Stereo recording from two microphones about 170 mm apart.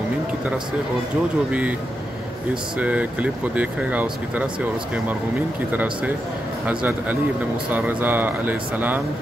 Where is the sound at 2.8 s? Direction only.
10° right (ahead or behind).